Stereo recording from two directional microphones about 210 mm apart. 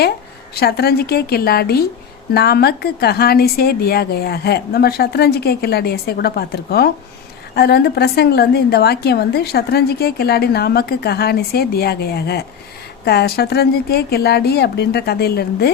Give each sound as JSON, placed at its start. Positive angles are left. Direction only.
{"t": 0.5, "sound": "a woman's voice", "side_deg": 50}